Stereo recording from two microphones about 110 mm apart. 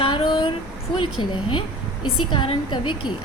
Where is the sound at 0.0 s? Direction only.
55° left (ahead or behind).